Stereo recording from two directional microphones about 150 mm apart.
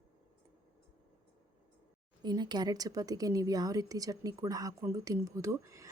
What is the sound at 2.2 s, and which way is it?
Speech, 30° right (ahead or behind).